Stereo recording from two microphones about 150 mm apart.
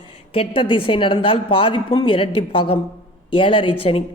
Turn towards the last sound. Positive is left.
turn(degrees=40)  # may be behind; listen again after turning